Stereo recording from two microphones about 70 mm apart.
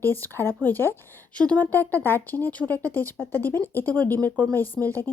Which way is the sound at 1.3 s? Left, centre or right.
Centre.